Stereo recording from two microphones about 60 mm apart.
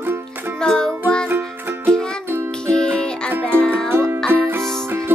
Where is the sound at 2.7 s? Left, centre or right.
Centre.